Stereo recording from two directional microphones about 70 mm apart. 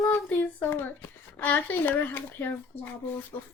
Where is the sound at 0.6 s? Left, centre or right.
Left.